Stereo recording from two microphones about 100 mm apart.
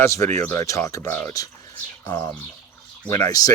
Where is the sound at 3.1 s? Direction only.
35° left (ahead or behind).